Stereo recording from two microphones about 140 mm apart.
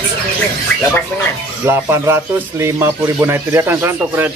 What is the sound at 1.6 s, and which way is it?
Speech, 20° right (ahead or behind).